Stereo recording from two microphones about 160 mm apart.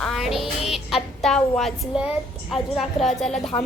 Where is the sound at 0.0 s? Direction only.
Centre (ahead or behind).